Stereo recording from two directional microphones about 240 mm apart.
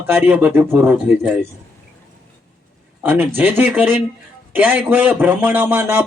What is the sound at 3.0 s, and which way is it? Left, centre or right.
Speech, centre.